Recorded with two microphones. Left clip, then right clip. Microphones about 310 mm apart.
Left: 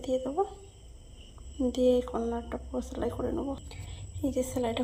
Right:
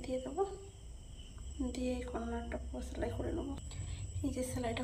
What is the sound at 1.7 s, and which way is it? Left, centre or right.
Speech, centre.